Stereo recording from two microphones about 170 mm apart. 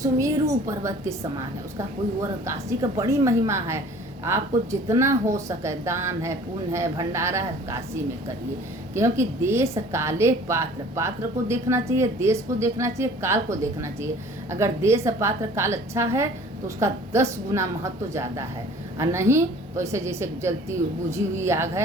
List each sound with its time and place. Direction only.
0.0 s a woman's voice: 20° right (ahead or behind)
2.4 s a woman's voice: 15° right (ahead or behind)
9.0 s a woman's voice: 15° right (ahead or behind)